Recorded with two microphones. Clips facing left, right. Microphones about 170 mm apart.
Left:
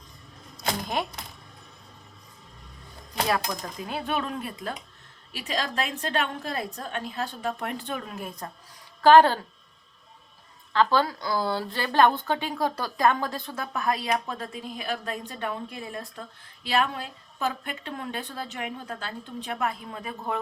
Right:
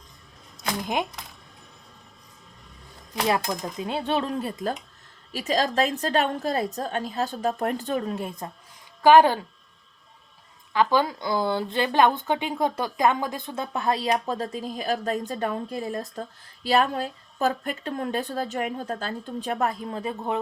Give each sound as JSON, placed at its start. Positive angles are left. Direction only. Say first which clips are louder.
{"t": 3.2, "sound": "a woman's voice", "louder": "right 4 dB", "side_deg": -20}
{"t": 9.0, "sound": "speech", "louder": "right 1 dB", "side_deg": -15}
{"t": 10.7, "sound": "a woman's voice", "louder": "right 1 dB", "side_deg": -15}